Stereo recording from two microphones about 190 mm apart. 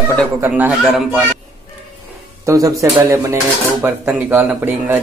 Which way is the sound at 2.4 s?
15° right (ahead or behind).